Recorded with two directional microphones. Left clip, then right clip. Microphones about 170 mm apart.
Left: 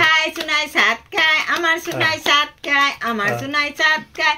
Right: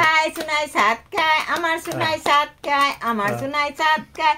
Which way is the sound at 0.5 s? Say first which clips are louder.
Left 2 dB; 30° right (ahead or behind).